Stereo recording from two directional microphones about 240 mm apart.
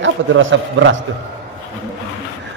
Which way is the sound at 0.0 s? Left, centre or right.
Right.